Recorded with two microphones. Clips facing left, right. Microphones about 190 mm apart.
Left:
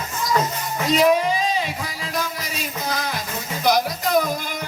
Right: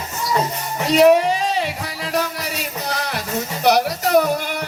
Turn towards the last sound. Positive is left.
turn(degrees=-70)  # may be behind; listen again after turning